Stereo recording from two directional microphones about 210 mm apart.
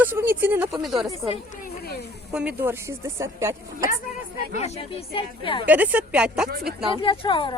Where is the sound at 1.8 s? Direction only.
50° left (ahead or behind).